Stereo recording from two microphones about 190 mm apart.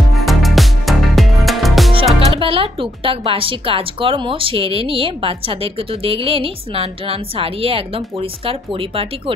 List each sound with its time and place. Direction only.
0.1 s music: centre (ahead or behind)
2.1 s speech: 30° right (ahead or behind)